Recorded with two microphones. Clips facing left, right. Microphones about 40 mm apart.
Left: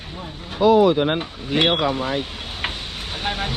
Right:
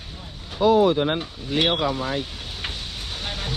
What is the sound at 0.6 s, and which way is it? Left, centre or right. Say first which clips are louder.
Speech: left 3 dB; left.